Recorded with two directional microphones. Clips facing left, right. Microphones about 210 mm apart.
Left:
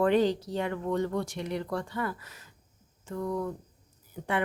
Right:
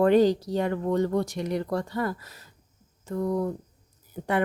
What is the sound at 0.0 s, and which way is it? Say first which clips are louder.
Speech: right 5 dB; 40° right (ahead or behind).